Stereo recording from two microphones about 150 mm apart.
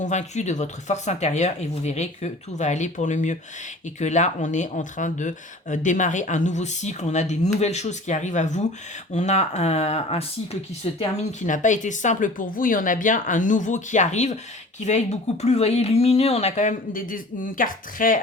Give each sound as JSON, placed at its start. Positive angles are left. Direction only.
{"t": 0.0, "sound": "speech", "side_deg": 50}